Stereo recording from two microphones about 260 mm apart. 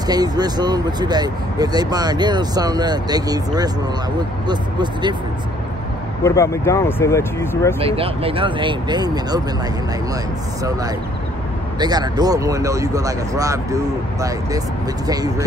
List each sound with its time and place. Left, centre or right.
0.0 s speech: centre
6.2 s speech: centre
7.8 s speech: right
11.8 s speech: centre